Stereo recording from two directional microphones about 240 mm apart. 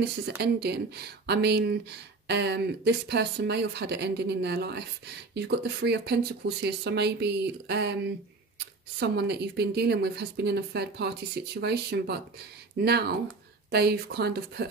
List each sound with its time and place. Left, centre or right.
0.0 s speech: right